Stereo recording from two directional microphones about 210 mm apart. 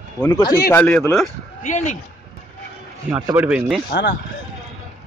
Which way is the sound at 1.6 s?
35° left (ahead or behind).